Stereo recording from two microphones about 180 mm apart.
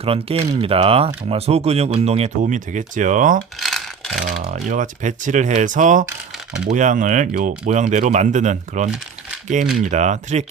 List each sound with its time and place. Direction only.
0.0 s speech: 30° right (ahead or behind)
3.6 s a sound: centre (ahead or behind)
4.4 s speech: 40° right (ahead or behind)